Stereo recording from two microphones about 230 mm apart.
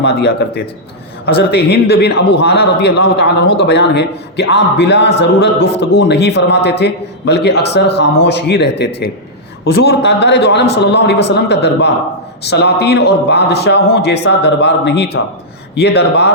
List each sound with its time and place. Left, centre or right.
0.0 s a man's voice: left